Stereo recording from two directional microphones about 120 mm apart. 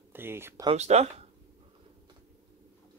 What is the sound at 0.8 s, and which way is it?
Speech, 65° right (ahead or behind).